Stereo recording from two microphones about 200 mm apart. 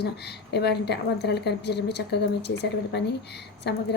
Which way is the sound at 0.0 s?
55° left (ahead or behind).